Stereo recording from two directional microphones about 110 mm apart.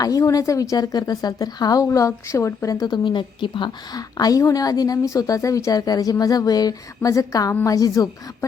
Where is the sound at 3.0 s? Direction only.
45° left (ahead or behind).